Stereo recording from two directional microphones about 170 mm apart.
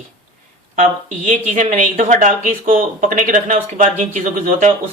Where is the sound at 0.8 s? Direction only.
45° right (ahead or behind).